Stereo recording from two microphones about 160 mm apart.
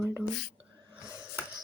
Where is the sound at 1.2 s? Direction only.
5° right (ahead or behind).